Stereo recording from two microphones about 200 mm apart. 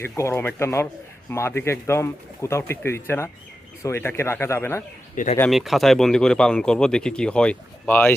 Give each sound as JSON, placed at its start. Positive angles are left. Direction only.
{"t": 0.0, "sound": "speech", "side_deg": 15}
{"t": 5.1, "sound": "speech", "side_deg": 40}
{"t": 5.4, "sound": "speech", "side_deg": 0}